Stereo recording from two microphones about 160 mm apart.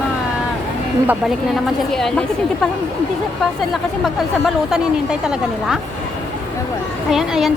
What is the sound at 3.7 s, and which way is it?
Speech, centre (ahead or behind).